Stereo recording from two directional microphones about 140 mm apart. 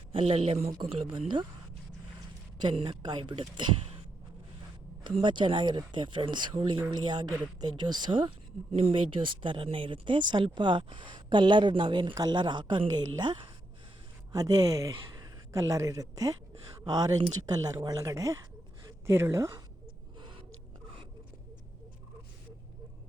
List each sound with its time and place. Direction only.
0.1 s a woman's voice: 45° right (ahead or behind)
2.6 s a woman's voice: 35° right (ahead or behind)
5.2 s a woman's voice: 35° right (ahead or behind)